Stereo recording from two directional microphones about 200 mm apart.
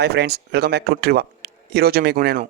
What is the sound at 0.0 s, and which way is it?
Speech, 55° right (ahead or behind).